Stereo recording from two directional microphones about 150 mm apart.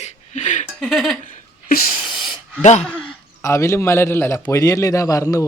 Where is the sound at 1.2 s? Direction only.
65° left (ahead or behind).